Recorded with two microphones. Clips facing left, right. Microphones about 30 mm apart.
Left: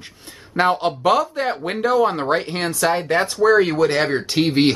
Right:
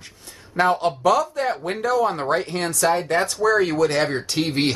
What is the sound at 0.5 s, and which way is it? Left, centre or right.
Speech, left.